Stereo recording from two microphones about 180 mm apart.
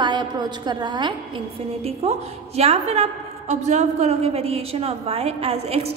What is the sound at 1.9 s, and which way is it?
A woman's voice, 35° right (ahead or behind).